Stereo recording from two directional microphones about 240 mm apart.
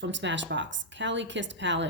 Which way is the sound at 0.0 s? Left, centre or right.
Right.